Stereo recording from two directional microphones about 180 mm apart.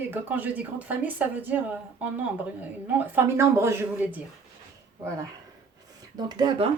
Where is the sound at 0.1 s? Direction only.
10° right (ahead or behind).